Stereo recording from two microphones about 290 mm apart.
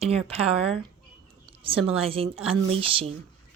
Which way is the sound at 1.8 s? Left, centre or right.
Centre.